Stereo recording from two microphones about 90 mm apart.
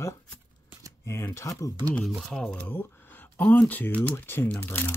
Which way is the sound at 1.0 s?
30° left (ahead or behind).